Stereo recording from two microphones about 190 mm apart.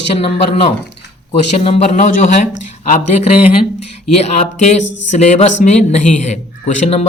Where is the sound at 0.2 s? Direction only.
30° left (ahead or behind).